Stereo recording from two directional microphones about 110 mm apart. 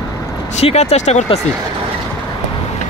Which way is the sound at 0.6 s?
75° left (ahead or behind).